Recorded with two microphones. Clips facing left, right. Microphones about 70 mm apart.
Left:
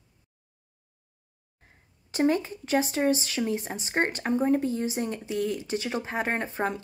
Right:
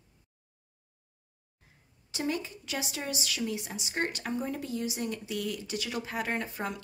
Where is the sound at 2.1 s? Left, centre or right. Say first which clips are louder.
Left 9 dB; left.